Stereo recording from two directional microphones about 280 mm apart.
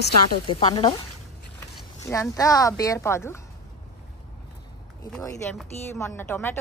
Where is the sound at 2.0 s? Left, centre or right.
Centre.